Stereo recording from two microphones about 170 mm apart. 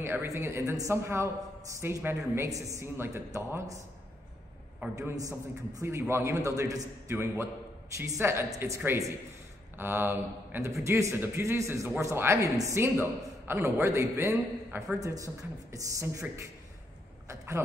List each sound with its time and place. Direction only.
0.0 s a man's voice: 15° right (ahead or behind)
4.9 s a man's voice: 20° right (ahead or behind)